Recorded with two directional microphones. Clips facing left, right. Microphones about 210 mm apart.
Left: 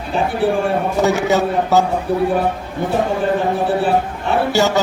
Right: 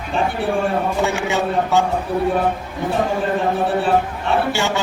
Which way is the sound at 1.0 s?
40° left (ahead or behind).